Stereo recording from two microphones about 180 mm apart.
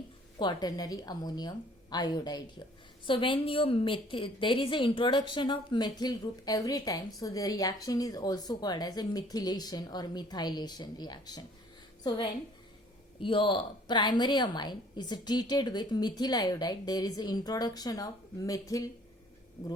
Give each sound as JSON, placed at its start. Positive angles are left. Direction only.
{"t": 0.3, "sound": "a woman's voice", "side_deg": 25}